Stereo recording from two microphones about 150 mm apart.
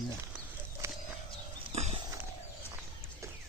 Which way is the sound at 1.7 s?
45° right (ahead or behind).